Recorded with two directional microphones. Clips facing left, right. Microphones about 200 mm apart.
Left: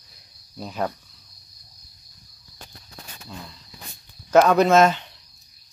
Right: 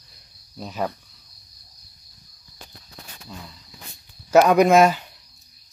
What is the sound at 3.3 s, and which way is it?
Speech, 5° right (ahead or behind).